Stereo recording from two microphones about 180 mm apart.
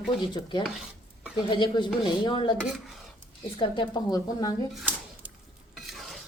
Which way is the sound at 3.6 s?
25° left (ahead or behind).